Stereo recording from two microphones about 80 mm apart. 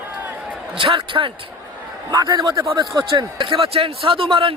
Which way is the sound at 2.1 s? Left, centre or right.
Right.